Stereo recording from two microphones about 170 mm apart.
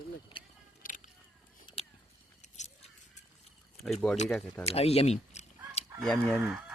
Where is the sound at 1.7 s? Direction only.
30° left (ahead or behind).